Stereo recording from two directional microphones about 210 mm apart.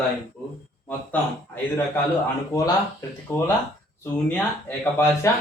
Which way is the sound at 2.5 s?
15° left (ahead or behind).